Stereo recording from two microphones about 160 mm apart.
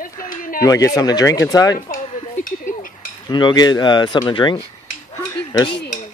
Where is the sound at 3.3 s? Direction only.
30° left (ahead or behind).